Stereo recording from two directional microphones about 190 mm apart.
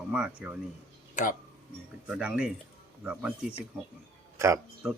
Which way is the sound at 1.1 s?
45° left (ahead or behind).